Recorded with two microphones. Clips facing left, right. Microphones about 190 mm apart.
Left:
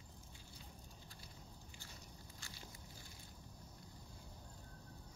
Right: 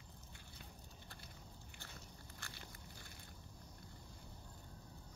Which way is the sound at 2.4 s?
60° right (ahead or behind).